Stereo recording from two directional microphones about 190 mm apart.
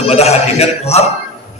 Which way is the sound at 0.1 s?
35° left (ahead or behind).